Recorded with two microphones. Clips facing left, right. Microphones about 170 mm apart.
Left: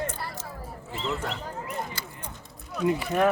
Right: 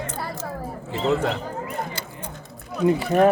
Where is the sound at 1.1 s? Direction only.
90° right.